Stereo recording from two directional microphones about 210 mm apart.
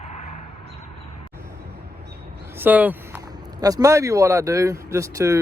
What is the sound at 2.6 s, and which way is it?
Speech, 10° right (ahead or behind).